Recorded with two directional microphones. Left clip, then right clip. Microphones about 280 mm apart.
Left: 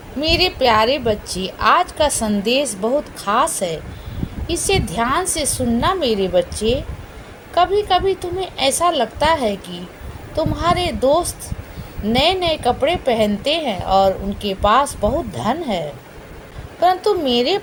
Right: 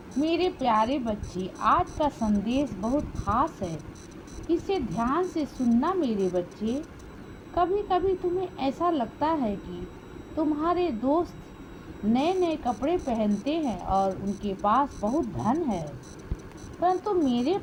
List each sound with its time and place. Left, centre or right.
0.2 s a woman's voice: right
16.8 s a woman's voice: right